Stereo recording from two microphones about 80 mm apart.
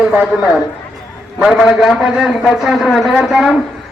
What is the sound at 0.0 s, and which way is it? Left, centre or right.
A man's voice, centre.